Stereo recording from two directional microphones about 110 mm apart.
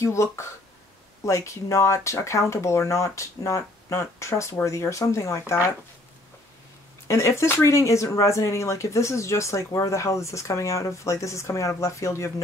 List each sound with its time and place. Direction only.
0.0 s speech: 25° left (ahead or behind)
7.1 s speech: 25° left (ahead or behind)